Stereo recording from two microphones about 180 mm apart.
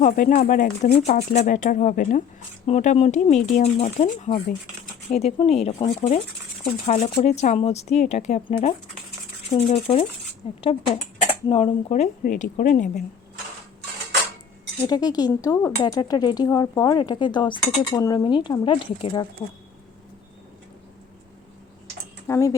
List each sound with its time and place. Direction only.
0.0 s speech: 45° left (ahead or behind)
9.6 s speech: 35° left (ahead or behind)
14.8 s speech: 20° left (ahead or behind)
22.3 s speech: 15° left (ahead or behind)